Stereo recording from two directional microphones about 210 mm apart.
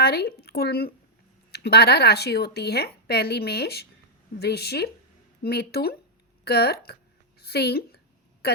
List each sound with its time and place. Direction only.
0.0 s a woman's voice: 50° left (ahead or behind)